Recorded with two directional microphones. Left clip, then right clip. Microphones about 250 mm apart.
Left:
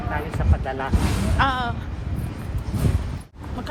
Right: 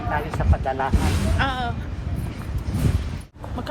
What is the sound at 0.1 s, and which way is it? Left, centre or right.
Speech, centre.